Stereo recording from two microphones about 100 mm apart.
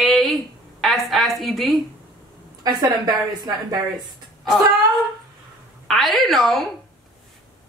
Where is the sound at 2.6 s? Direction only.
40° right (ahead or behind).